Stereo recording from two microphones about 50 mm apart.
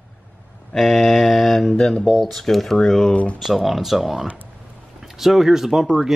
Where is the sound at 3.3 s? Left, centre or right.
Centre.